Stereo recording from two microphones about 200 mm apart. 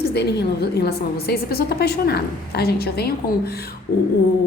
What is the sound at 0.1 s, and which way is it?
A woman's voice, 55° left (ahead or behind).